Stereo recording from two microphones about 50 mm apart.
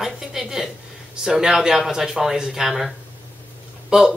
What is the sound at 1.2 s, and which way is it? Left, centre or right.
Speech, centre.